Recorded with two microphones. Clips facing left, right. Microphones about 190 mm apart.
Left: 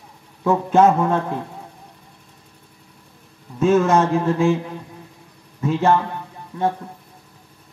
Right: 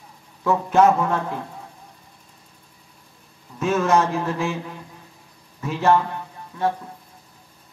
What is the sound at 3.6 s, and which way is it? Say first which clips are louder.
Speech: left 4 dB; 25° left (ahead or behind).